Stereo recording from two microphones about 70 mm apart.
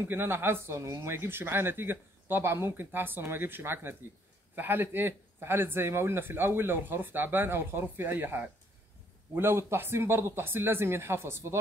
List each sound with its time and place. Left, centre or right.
0.1 s speech: right
0.7 s speech: right
1.1 s speech: right